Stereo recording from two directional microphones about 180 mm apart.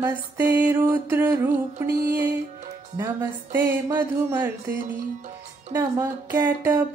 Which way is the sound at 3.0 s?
10° right (ahead or behind).